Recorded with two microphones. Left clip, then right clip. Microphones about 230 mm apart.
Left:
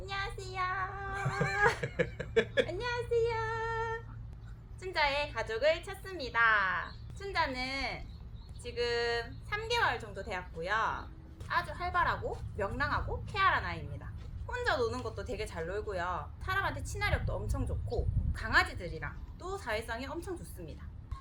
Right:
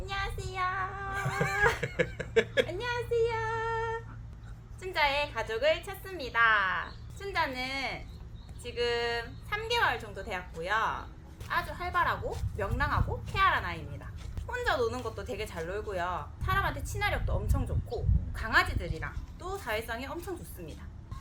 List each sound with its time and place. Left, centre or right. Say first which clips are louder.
0.0 s child singing: right 2 dB; centre
1.1 s cat: right 3 dB; right
1.5 s cat: right 1 dB; centre
1.8 s a sound: right 3 dB; right
2.6 s child singing: right 2 dB; centre
4.8 s a woman's voice: right 3 dB; centre